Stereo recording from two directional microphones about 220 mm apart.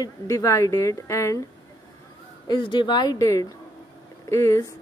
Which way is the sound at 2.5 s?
20° left (ahead or behind).